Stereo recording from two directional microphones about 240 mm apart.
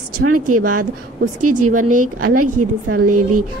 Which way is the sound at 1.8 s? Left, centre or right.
Right.